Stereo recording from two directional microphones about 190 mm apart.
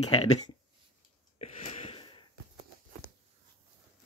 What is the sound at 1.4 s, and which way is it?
Wheeze, 35° left (ahead or behind).